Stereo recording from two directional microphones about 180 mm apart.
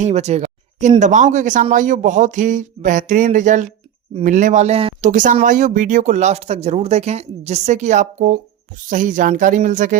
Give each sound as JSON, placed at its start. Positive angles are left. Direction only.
{"t": 0.0, "sound": "speech", "side_deg": -40}